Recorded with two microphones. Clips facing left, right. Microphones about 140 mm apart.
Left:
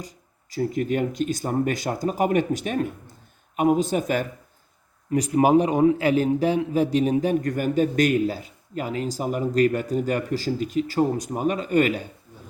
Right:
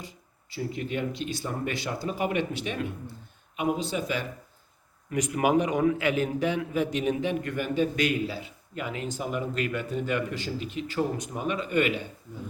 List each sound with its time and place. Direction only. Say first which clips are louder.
0.5 s speech: left 7 dB; 45° left (ahead or behind)
5.1 s a man's voice: left 6 dB; 35° left (ahead or behind)